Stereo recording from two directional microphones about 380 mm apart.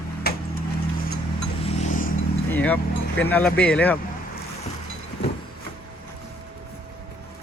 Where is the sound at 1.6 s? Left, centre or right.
Centre.